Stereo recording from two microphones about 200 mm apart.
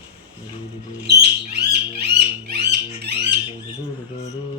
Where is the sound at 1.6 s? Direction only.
55° right (ahead or behind).